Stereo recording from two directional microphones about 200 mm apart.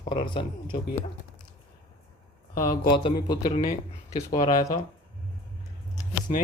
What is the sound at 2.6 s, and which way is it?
Speech, 20° left (ahead or behind).